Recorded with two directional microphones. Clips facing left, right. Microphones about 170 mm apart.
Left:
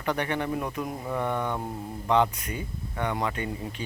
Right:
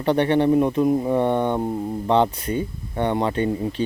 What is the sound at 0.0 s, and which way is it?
Speech, 30° right (ahead or behind).